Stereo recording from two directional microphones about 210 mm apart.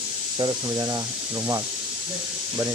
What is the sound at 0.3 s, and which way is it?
Speech, 20° right (ahead or behind).